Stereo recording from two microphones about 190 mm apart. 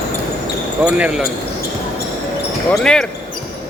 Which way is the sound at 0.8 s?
5° right (ahead or behind).